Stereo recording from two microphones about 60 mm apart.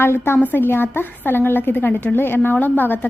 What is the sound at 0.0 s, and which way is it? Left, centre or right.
A woman's voice, left.